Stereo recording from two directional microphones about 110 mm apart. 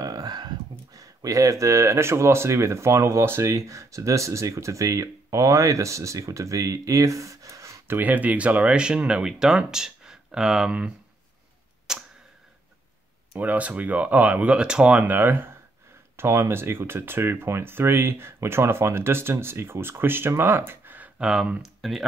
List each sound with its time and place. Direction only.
0.0 s speech: 35° right (ahead or behind)
8.0 s speech: 15° right (ahead or behind)
11.9 s arrow: 5° right (ahead or behind)
13.4 s speech: 15° right (ahead or behind)